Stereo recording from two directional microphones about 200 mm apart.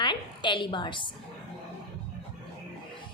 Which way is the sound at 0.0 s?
25° left (ahead or behind).